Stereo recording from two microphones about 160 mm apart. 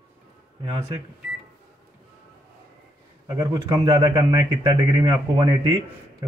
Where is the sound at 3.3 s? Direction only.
20° right (ahead or behind).